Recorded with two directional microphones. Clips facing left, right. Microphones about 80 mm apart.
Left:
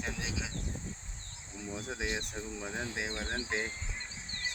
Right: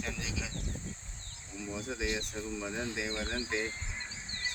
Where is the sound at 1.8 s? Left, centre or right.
Left.